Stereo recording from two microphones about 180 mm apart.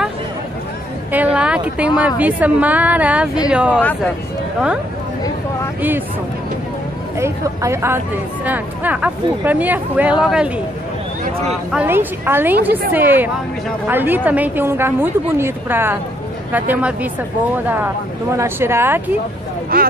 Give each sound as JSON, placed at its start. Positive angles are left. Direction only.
{"t": 1.1, "sound": "a woman's voice", "side_deg": -5}
{"t": 5.8, "sound": "a woman's voice", "side_deg": -10}
{"t": 7.2, "sound": "a woman's voice", "side_deg": -15}
{"t": 11.7, "sound": "a woman's voice", "side_deg": -10}
{"t": 19.7, "sound": "speech", "side_deg": -55}